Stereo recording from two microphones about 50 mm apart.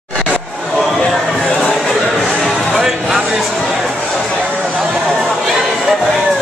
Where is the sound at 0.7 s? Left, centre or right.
Centre.